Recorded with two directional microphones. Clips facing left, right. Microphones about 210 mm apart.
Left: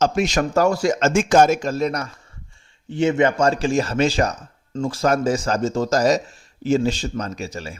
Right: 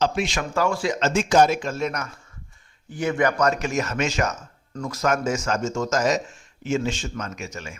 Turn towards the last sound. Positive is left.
turn(degrees=35)  # may be behind; listen again after turning